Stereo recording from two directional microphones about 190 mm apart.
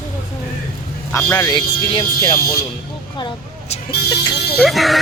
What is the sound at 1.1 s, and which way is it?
Speech, 15° left (ahead or behind).